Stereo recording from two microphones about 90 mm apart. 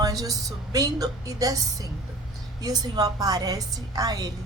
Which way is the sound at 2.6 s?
45° right (ahead or behind).